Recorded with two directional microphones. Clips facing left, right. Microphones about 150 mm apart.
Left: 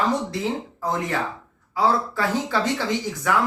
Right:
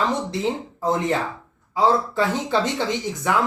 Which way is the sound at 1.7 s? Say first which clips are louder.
Right 2 dB; 20° right (ahead or behind).